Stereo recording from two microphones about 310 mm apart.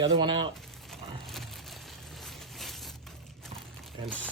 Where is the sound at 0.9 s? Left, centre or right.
Centre.